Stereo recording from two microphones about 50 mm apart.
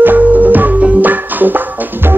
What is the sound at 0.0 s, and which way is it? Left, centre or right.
Music, right.